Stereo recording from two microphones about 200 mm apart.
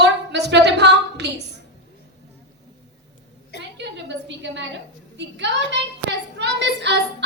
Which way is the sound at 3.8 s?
60° right (ahead or behind).